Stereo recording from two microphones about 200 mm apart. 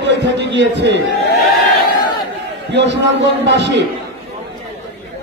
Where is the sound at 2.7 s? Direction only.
60° right (ahead or behind).